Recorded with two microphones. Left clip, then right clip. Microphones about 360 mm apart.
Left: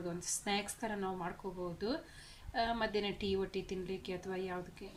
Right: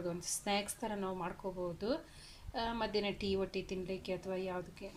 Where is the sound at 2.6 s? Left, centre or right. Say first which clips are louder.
Left 2 dB; centre.